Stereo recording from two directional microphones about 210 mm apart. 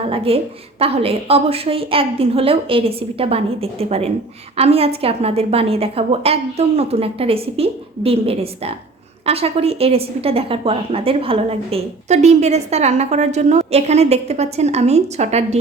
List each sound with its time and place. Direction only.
0.3 s a woman's voice: 25° right (ahead or behind)